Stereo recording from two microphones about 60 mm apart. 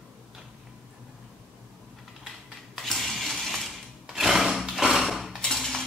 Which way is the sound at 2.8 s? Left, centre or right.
Centre.